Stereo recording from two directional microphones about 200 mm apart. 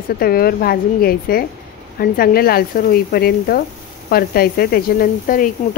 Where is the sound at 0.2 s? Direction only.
50° left (ahead or behind).